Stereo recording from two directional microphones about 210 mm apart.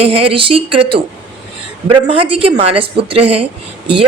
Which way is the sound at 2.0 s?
25° right (ahead or behind).